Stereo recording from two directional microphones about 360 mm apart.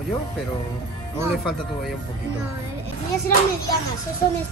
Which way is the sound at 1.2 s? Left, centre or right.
Centre.